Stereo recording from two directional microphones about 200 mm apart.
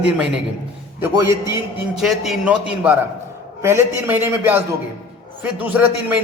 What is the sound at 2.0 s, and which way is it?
A man's voice, centre (ahead or behind).